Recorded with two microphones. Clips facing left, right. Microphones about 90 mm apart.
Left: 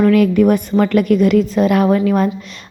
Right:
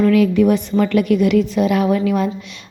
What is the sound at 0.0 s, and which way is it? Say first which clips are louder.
Speech: left 2 dB; 50° left (ahead or behind).